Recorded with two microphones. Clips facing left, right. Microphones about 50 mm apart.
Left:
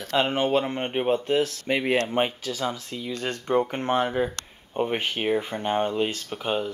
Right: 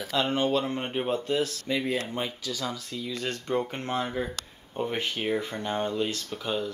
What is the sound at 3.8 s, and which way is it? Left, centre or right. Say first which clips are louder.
Speech: left 6 dB; left.